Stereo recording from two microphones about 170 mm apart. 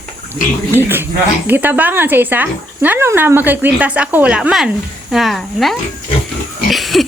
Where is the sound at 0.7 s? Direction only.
10° right (ahead or behind).